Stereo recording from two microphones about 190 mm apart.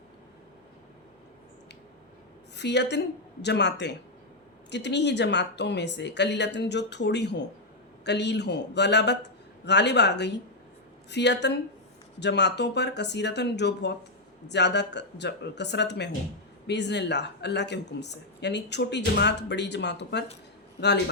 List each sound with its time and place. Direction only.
2.6 s speech: 65° left (ahead or behind)